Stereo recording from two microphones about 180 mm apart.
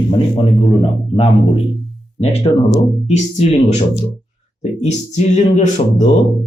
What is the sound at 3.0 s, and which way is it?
Speech, 40° left (ahead or behind).